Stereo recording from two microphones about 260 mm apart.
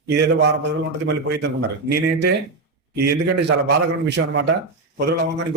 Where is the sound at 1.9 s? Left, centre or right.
Right.